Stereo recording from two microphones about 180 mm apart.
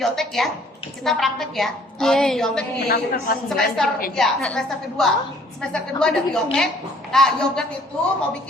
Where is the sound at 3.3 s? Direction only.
55° left (ahead or behind).